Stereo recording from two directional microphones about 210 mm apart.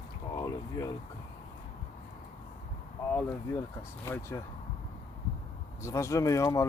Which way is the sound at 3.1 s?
10° left (ahead or behind).